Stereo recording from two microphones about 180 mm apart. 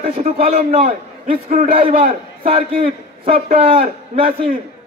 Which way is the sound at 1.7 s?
30° right (ahead or behind).